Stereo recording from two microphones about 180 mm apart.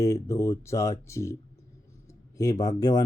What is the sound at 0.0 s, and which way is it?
Speech, 15° left (ahead or behind).